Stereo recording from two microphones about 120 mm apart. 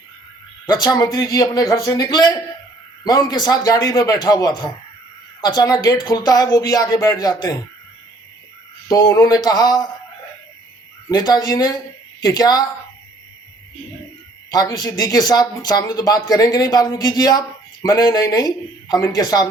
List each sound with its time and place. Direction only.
0.7 s speech: 30° left (ahead or behind)
8.9 s speech: 30° left (ahead or behind)
11.1 s speech: 35° left (ahead or behind)
14.5 s speech: 30° left (ahead or behind)